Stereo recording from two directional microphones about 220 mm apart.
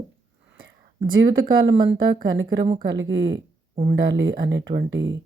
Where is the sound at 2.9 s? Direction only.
60° right (ahead or behind).